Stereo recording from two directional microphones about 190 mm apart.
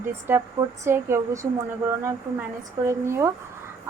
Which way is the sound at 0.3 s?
10° right (ahead or behind).